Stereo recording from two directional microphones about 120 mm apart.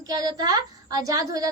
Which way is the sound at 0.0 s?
30° right (ahead or behind).